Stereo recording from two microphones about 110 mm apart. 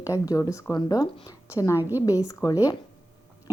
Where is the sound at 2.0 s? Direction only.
30° left (ahead or behind).